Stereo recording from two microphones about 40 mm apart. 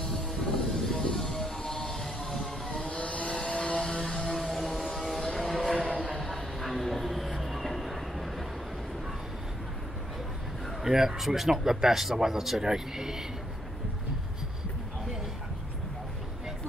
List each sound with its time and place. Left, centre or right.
0.0 s music: centre
2.2 s vehicle: centre
2.9 s vehicle: left
3.8 s a sound: centre
4.4 s music: centre
4.9 s vehicle: centre
5.8 s train: centre
6.1 s a sound: centre
6.6 s train: centre
10.8 s speech: centre